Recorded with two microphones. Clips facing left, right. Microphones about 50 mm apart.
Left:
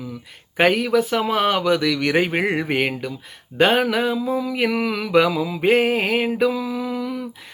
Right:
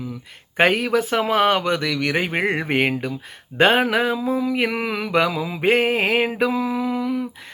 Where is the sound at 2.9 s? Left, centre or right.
Centre.